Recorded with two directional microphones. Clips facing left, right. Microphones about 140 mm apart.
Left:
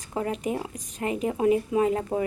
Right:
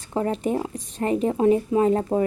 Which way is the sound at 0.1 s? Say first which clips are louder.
Right 4 dB; 30° right (ahead or behind).